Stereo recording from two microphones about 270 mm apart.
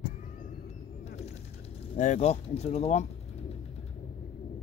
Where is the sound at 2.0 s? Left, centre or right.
Left.